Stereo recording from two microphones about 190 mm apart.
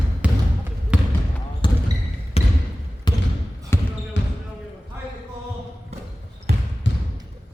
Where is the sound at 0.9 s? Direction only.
5° right (ahead or behind).